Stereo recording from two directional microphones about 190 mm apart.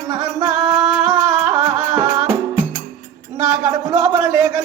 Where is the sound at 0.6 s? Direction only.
5° right (ahead or behind).